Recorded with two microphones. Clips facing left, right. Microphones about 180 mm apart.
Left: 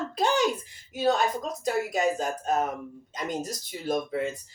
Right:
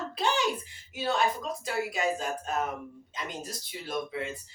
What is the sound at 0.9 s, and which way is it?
Speech, 40° left (ahead or behind).